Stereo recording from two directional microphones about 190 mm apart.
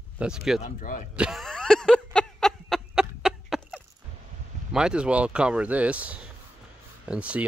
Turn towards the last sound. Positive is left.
turn(degrees=-5)  # may be behind; listen again after turning